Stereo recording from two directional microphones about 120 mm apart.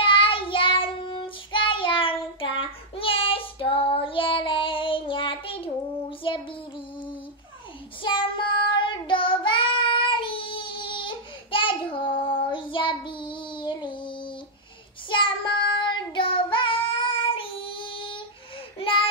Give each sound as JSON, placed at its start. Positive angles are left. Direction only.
{"t": 0.0, "sound": "child singing", "side_deg": 45}
{"t": 8.0, "sound": "child singing", "side_deg": 45}
{"t": 18.8, "sound": "a sound", "side_deg": 50}